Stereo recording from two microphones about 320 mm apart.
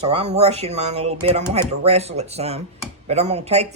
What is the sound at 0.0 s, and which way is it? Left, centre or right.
Speech, centre.